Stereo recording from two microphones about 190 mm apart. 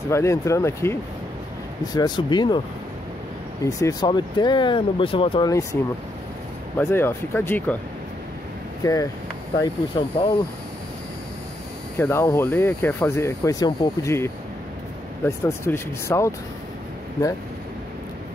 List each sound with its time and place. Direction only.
0.1 s speech: 15° left (ahead or behind)
2.0 s speech: 20° left (ahead or behind)
3.6 s speech: 20° left (ahead or behind)
6.8 s speech: 10° left (ahead or behind)
8.8 s speech: 15° left (ahead or behind)
9.6 s speech: 30° left (ahead or behind)
12.0 s speech: 15° left (ahead or behind)
15.2 s speech: 15° left (ahead or behind)